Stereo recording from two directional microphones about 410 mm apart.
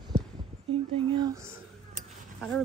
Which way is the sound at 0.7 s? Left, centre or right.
Centre.